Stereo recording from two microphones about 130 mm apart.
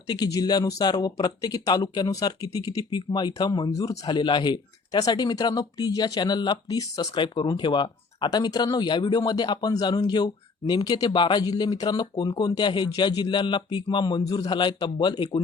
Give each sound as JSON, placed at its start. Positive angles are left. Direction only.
{"t": 0.1, "sound": "speech", "side_deg": 30}